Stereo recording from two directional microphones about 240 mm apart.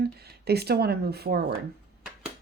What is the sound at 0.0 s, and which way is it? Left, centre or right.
Speech, right.